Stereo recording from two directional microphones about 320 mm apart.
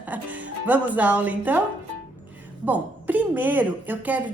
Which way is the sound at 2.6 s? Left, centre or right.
Centre.